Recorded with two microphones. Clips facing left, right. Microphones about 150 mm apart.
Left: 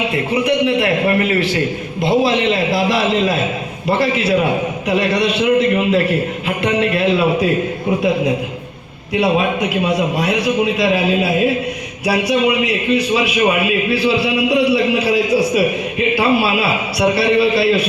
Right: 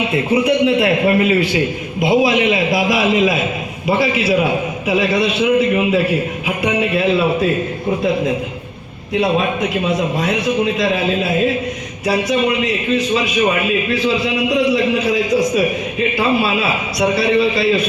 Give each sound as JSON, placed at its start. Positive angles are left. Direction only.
{"t": 0.6, "sound": "a man's voice", "side_deg": -20}
{"t": 9.1, "sound": "a man's voice", "side_deg": 5}